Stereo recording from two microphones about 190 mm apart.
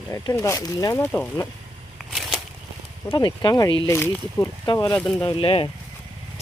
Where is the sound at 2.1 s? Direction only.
Centre (ahead or behind).